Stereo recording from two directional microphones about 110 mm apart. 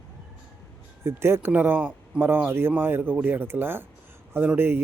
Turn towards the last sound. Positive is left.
turn(degrees=-20)  # may be behind; listen again after turning